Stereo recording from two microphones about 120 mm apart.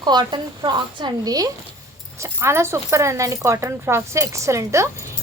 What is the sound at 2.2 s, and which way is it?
Speech, 20° right (ahead or behind).